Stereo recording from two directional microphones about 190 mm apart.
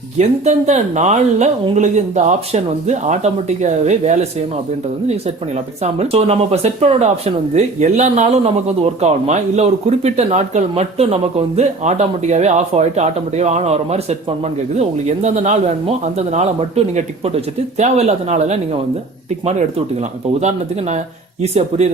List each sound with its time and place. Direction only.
0.2 s speech: 35° right (ahead or behind)